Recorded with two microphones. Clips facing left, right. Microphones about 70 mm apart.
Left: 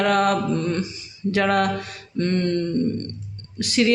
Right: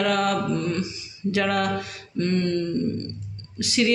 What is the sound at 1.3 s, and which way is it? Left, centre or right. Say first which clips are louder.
Speech: left 3 dB; left.